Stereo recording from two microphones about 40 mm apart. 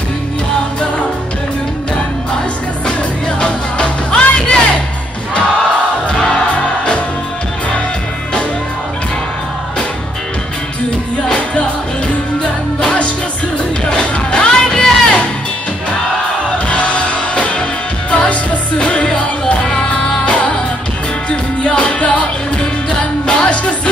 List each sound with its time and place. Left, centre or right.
3.3 s music: left
11.2 s music: left
12.8 s music: left
16.5 s music: left